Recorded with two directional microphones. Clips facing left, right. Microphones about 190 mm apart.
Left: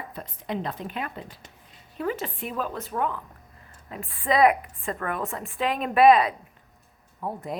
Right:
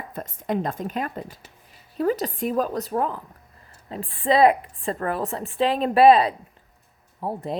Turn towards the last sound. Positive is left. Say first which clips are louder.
# right 4 dB
turn(degrees=-30)  # may be behind; listen again after turning